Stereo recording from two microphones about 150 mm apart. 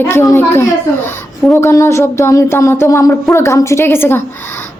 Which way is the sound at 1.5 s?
20° left (ahead or behind).